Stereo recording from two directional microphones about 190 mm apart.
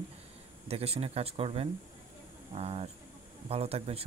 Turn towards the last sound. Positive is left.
turn(degrees=-30)  # may be behind; listen again after turning